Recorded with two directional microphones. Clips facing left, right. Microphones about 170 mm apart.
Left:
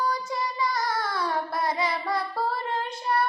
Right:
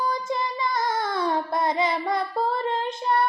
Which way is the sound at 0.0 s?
25° right (ahead or behind).